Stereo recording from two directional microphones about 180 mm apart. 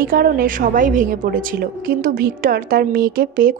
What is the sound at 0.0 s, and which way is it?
A woman's voice, 50° right (ahead or behind).